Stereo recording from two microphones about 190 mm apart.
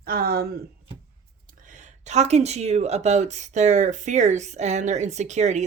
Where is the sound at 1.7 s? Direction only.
40° right (ahead or behind).